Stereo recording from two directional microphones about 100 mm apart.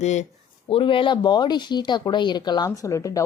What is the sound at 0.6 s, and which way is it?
Speech, 65° left (ahead or behind).